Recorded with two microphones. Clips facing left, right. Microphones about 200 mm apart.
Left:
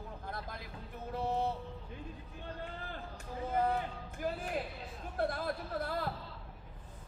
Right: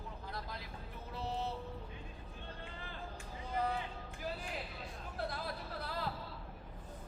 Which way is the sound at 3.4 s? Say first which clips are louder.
Left 5 dB; 50° left (ahead or behind).